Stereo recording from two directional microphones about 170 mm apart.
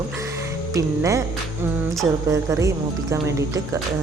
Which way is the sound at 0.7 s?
20° right (ahead or behind).